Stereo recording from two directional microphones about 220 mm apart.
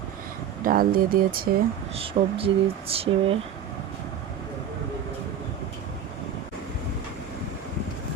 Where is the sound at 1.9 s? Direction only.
25° right (ahead or behind).